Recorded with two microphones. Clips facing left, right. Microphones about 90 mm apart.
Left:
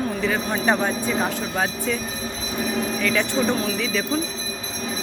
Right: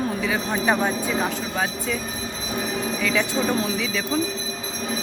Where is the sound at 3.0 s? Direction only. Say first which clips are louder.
Left 1 dB; 5° right (ahead or behind).